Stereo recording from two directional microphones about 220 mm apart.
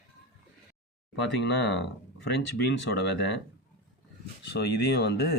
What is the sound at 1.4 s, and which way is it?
Speech, 50° left (ahead or behind).